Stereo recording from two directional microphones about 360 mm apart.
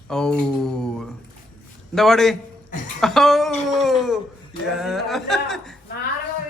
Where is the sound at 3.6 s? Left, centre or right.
Centre.